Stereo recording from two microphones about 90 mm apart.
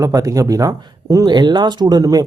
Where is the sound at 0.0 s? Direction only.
40° right (ahead or behind).